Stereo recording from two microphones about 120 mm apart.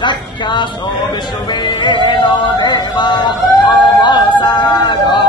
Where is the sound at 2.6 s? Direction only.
40° left (ahead or behind).